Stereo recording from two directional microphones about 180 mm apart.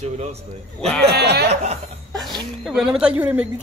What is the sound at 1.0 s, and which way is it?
Speech, 60° right (ahead or behind).